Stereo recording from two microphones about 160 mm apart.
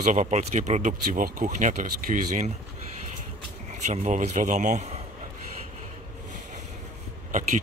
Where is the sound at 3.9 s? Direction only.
45° right (ahead or behind).